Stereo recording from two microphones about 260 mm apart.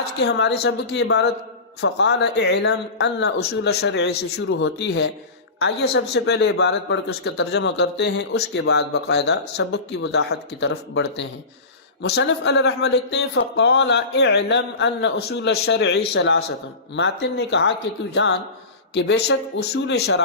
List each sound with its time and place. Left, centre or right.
0.0 s a man's voice: left